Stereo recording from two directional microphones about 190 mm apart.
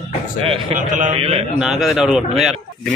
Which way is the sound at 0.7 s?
40° right (ahead or behind).